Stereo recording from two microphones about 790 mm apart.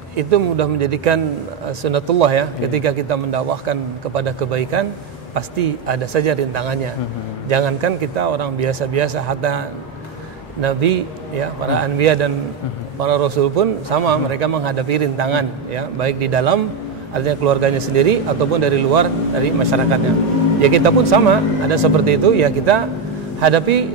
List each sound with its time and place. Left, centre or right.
0.1 s a man's voice: right
10.6 s a man's voice: right